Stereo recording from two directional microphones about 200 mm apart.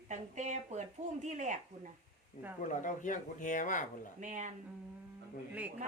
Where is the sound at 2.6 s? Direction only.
40° left (ahead or behind).